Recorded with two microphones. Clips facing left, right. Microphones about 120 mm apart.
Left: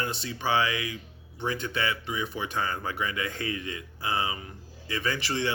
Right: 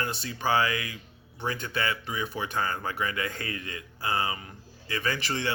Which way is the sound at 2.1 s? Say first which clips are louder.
Left 1 dB; 25° left (ahead or behind).